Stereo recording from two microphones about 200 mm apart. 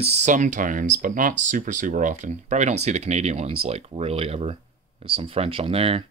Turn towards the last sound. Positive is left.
turn(degrees=-30)  # may be behind; listen again after turning